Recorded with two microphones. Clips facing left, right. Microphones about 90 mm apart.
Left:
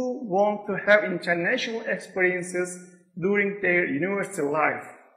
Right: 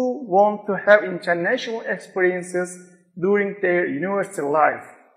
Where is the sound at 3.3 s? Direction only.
35° right (ahead or behind).